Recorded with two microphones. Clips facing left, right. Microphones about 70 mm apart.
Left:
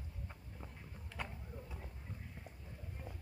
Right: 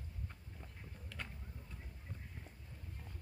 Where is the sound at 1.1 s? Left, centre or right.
Centre.